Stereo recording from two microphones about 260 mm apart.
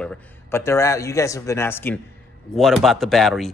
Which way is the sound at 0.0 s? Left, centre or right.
Centre.